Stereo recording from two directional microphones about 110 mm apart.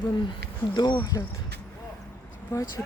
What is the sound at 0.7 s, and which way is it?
Speech, 45° left (ahead or behind).